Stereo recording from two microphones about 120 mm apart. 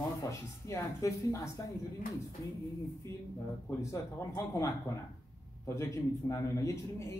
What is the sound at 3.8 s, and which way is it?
A man's voice, 25° left (ahead or behind).